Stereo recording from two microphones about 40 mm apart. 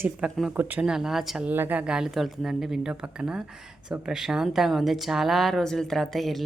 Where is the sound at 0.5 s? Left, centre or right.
Right.